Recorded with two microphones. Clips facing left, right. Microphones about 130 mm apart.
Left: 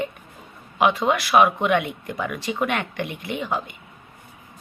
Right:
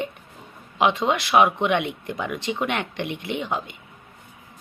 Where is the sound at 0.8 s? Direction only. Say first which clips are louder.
Left 1 dB; 20° right (ahead or behind).